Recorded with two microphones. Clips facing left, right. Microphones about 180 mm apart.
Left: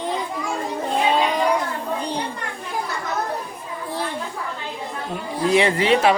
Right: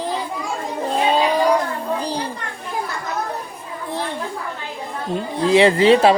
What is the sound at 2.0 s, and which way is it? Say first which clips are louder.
Children playing: right 2 dB; 35° right (ahead or behind).